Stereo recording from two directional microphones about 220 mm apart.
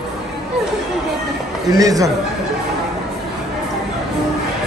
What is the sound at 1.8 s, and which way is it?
Speech, 15° right (ahead or behind).